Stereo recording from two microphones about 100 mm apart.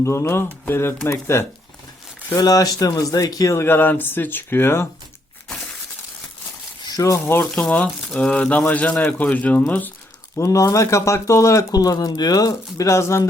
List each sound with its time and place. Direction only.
0.0 s speech: 25° left (ahead or behind)
2.3 s speech: 35° left (ahead or behind)
6.8 s speech: 40° left (ahead or behind)
7.6 s speech: 10° left (ahead or behind)
10.3 s speech: 30° left (ahead or behind)